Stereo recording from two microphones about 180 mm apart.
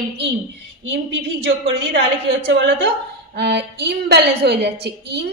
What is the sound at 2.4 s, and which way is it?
Speech, 85° right.